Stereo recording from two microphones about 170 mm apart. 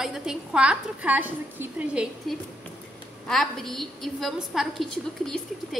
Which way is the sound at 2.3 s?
Centre (ahead or behind).